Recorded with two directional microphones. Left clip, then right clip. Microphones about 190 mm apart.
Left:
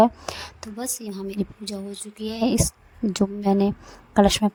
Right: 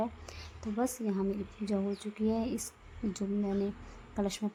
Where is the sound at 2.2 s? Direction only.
50° left (ahead or behind).